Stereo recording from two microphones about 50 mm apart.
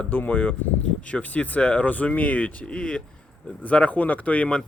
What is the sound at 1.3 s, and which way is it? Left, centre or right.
Speech, left.